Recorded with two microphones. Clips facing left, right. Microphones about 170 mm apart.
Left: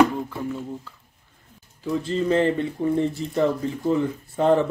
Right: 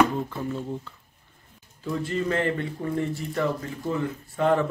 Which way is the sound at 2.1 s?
25° left (ahead or behind).